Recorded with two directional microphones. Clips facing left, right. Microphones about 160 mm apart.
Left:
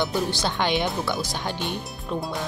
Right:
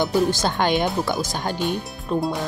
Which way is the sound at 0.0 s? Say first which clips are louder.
Right 5 dB; 45° right (ahead or behind).